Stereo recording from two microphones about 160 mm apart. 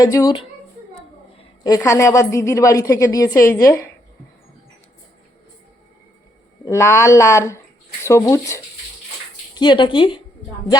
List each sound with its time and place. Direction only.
0.0 s a woman's voice: 20° left (ahead or behind)
1.6 s a woman's voice: 20° left (ahead or behind)
6.7 s a woman's voice: 15° left (ahead or behind)
9.6 s a woman's voice: 30° left (ahead or behind)